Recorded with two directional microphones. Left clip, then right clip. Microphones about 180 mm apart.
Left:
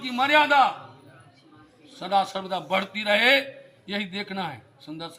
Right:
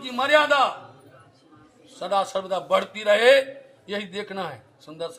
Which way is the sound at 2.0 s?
30° right (ahead or behind).